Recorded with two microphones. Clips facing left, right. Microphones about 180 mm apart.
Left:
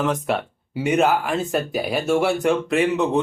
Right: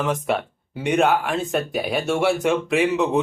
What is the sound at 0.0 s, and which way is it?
A man's voice, centre (ahead or behind).